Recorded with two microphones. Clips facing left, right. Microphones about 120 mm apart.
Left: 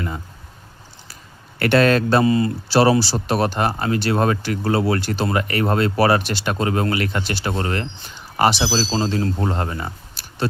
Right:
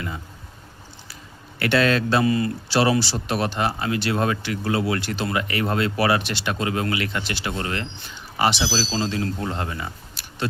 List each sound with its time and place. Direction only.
1.5 s a man's voice: 45° left (ahead or behind)
2.2 s speech: 25° left (ahead or behind)